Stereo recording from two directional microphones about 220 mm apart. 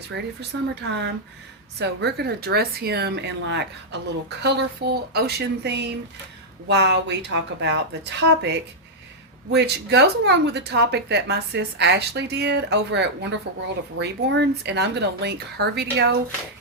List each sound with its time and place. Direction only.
0.1 s speech: 55° right (ahead or behind)